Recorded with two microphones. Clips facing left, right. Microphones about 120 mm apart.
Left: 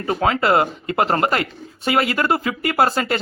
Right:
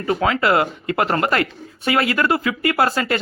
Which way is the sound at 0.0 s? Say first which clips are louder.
Even; 30° left (ahead or behind).